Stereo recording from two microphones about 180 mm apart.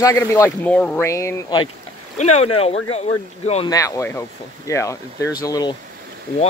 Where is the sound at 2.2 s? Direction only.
35° left (ahead or behind).